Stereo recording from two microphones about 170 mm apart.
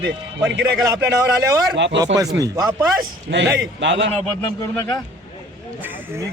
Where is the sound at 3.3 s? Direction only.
90° right.